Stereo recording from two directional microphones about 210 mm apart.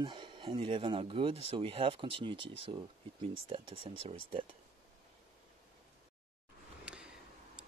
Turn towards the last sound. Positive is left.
turn(degrees=-5)  # may be behind; listen again after turning